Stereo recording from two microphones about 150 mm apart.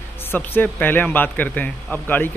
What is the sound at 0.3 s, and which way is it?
Speech, 15° left (ahead or behind).